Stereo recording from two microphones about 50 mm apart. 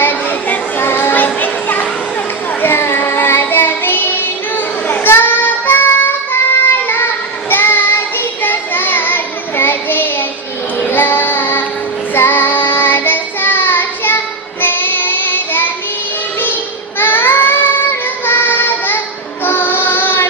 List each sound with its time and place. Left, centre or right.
0.0 s children playing: left
0.8 s children playing: left
2.6 s child singing: left
17.0 s baby cry: left
18.3 s child singing: left